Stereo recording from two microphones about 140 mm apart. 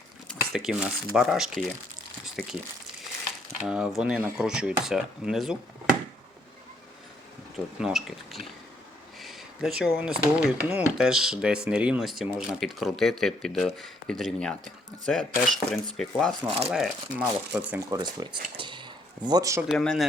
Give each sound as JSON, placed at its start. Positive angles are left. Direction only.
{"t": 0.3, "sound": "speech", "side_deg": 0}
{"t": 2.2, "sound": "crumpling", "side_deg": 0}
{"t": 3.7, "sound": "speech", "side_deg": -5}
{"t": 7.8, "sound": "speech", "side_deg": -5}
{"t": 17.9, "sound": "speech", "side_deg": -30}
{"t": 19.6, "sound": "speech", "side_deg": 5}